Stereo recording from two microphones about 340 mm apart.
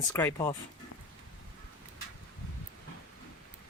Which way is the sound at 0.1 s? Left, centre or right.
Centre.